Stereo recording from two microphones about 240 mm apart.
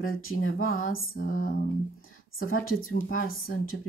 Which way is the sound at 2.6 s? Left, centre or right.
Left.